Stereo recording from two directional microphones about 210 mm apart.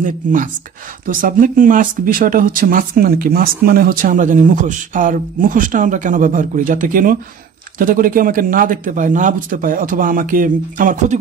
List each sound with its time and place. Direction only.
0.0 s speech: 40° right (ahead or behind)